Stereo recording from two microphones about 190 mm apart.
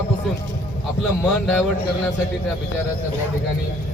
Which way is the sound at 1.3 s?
5° left (ahead or behind).